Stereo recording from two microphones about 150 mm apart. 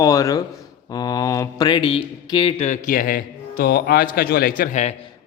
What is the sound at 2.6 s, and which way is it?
A man's voice, 60° left (ahead or behind).